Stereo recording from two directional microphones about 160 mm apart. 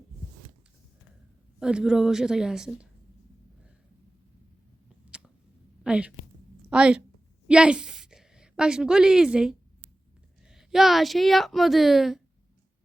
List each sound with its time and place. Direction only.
1.5 s a woman's voice: 5° right (ahead or behind)
5.8 s a woman's voice: 5° right (ahead or behind)